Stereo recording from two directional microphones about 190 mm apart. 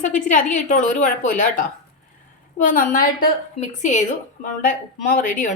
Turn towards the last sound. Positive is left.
turn(degrees=45)  # may be behind; listen again after turning